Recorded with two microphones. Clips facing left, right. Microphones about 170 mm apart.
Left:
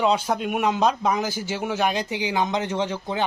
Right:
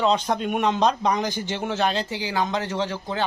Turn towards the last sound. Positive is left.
turn(degrees=15)  # may be behind; listen again after turning